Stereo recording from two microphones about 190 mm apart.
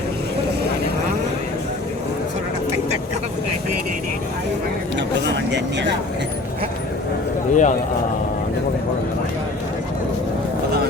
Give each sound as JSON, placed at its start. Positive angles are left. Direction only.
{"t": 4.9, "sound": "vehicle", "side_deg": -65}
{"t": 7.5, "sound": "a man's voice", "side_deg": 40}